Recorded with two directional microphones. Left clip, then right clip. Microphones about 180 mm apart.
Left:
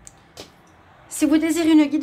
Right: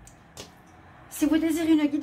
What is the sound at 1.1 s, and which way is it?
Speech, 25° left (ahead or behind).